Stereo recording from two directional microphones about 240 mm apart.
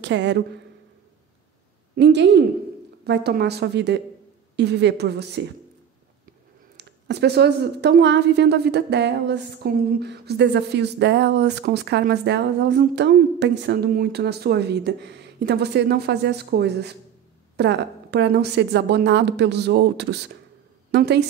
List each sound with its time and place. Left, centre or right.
0.0 s a woman's voice: right
2.0 s a woman's voice: right
6.8 s a woman's voice: right